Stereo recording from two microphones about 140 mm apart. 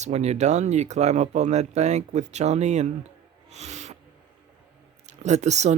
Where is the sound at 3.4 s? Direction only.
50° right (ahead or behind).